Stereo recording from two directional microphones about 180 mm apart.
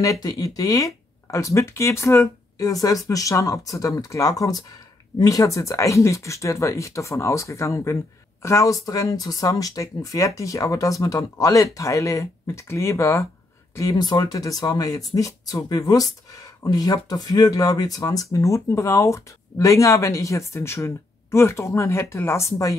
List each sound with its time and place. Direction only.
0.0 s speech: 20° left (ahead or behind)